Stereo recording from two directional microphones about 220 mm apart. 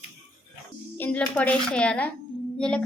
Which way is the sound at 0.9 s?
5° left (ahead or behind).